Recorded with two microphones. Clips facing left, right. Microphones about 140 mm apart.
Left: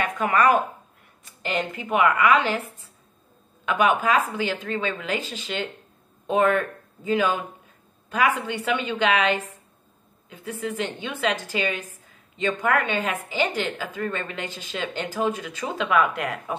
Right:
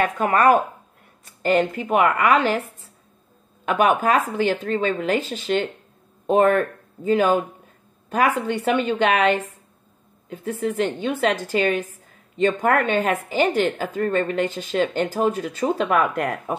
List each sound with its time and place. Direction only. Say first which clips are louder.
0.0 s a woman's voice: right 3 dB; 45° right (ahead or behind)
3.6 s a woman's voice: right 3 dB; 45° right (ahead or behind)